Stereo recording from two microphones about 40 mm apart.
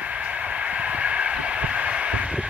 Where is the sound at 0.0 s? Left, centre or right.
Right.